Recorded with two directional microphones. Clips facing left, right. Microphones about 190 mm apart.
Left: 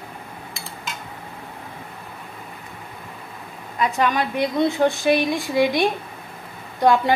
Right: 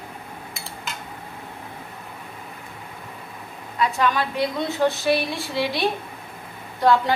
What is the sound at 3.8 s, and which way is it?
A woman's voice, 15° left (ahead or behind).